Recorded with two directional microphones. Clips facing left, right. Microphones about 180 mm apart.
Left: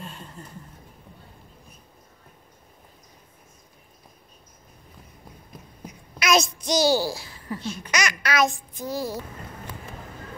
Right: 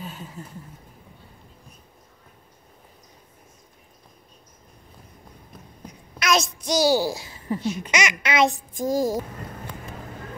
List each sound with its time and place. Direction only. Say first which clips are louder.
0.0 s a sound: right 3 dB; 5° right (ahead or behind)
6.1 s a child's voice: left 1 dB; centre (ahead or behind); by 8.5 s 25° right (ahead or behind)
8.5 s a child's voice: right 6 dB; 40° right (ahead or behind)